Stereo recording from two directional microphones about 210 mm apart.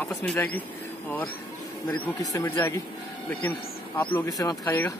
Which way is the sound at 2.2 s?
15° left (ahead or behind).